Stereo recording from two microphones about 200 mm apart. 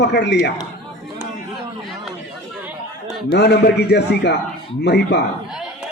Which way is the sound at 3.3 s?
55° left (ahead or behind).